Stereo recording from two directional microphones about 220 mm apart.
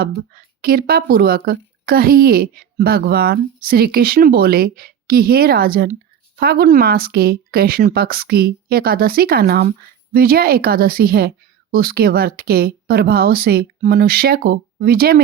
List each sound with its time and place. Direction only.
0.0 s speech: 45° right (ahead or behind)